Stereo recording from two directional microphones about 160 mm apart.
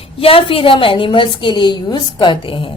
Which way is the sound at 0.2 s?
35° left (ahead or behind).